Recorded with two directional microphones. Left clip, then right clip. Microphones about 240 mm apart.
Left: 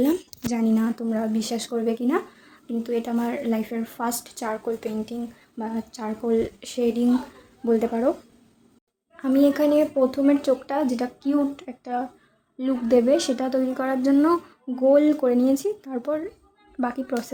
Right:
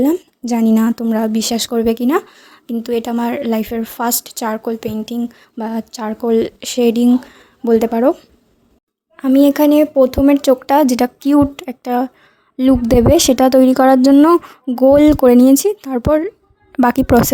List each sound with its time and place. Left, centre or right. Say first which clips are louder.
0.0 s speech: right 7 dB; right
9.1 s a woman's voice: right 8 dB; right